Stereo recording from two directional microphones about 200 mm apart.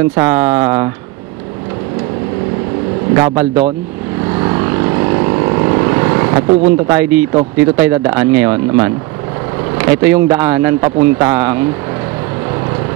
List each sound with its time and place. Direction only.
0.1 s speech: 20° right (ahead or behind)
3.2 s speech: 15° right (ahead or behind)
4.4 s vehicle: 20° right (ahead or behind)
9.8 s speech: 15° right (ahead or behind)